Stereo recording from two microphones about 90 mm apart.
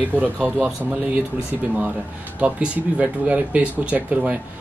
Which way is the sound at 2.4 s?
15° right (ahead or behind).